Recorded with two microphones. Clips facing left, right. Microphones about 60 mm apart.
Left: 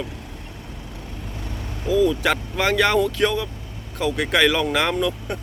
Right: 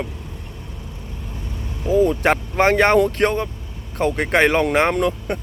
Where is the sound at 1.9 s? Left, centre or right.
Right.